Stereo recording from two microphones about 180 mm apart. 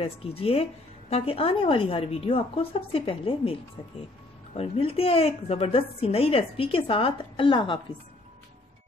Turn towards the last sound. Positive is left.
turn(degrees=25)  # may be behind; listen again after turning